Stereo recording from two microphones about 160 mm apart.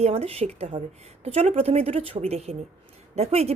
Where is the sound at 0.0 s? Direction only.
40° right (ahead or behind).